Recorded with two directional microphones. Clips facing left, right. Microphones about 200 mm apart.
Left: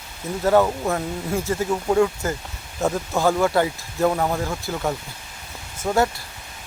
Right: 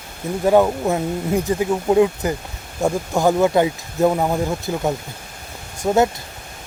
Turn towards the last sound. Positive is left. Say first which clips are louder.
# right 4 dB
turn(degrees=-20)  # may be behind; listen again after turning